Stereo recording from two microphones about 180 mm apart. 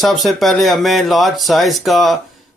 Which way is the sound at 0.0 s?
Centre (ahead or behind).